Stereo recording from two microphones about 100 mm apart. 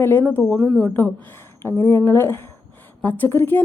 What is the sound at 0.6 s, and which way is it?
Speech, centre (ahead or behind).